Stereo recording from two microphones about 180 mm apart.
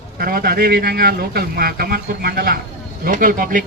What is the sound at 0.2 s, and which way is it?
A man's voice, 55° right (ahead or behind).